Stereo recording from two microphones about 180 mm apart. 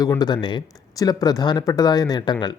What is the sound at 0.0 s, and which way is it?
Speech, 20° left (ahead or behind).